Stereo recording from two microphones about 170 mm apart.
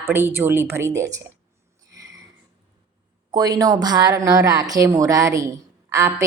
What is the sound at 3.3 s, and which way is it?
A woman's voice, 20° right (ahead or behind).